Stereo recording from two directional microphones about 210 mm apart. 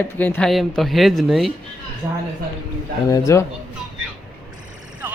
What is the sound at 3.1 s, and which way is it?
Speech, 15° left (ahead or behind).